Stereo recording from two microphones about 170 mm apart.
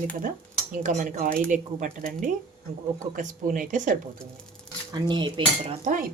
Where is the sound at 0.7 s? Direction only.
45° right (ahead or behind).